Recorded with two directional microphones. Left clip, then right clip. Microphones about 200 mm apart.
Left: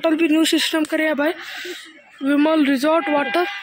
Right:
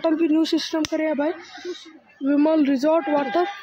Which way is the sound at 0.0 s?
Centre (ahead or behind).